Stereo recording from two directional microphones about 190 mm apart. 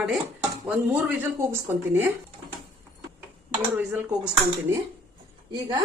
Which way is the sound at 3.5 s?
10° right (ahead or behind).